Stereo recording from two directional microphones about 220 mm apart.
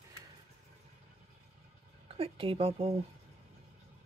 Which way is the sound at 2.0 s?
25° right (ahead or behind).